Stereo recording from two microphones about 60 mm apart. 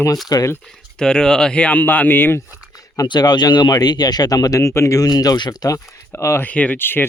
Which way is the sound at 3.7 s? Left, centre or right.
Left.